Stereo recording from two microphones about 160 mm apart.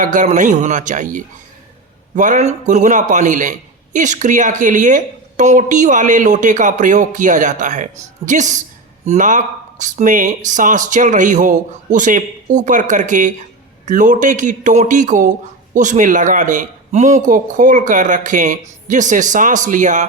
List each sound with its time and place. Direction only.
0.0 s speech: 50° right (ahead or behind)